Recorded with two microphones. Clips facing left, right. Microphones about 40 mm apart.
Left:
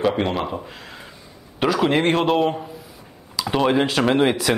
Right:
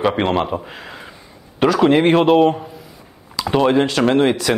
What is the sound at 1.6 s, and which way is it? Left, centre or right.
Speech, centre.